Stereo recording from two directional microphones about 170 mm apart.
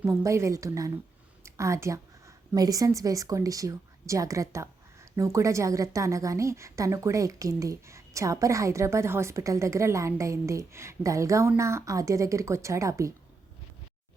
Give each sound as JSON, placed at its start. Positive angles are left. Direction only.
{"t": 0.0, "sound": "a woman's voice", "side_deg": -15}